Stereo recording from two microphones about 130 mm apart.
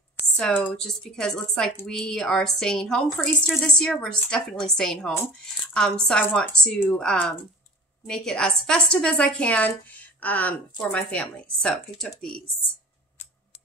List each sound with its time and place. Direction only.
0.4 s a woman's voice: 10° left (ahead or behind)
5.1 s a woman's voice: 15° left (ahead or behind)
5.8 s a woman's voice: 5° left (ahead or behind)